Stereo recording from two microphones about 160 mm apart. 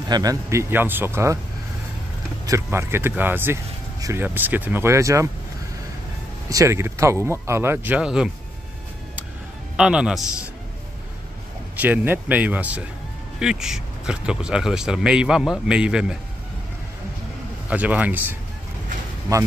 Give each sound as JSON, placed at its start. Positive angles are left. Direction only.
{"t": 0.1, "sound": "speech", "side_deg": -20}
{"t": 2.4, "sound": "speech", "side_deg": -20}
{"t": 6.5, "sound": "speech", "side_deg": -20}
{"t": 9.8, "sound": "a man's voice", "side_deg": -5}
{"t": 11.7, "sound": "a man's voice", "side_deg": -10}
{"t": 17.6, "sound": "speech", "side_deg": -10}